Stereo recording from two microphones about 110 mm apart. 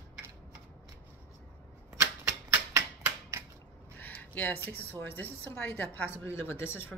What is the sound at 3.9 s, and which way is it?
A woman's voice, 15° left (ahead or behind).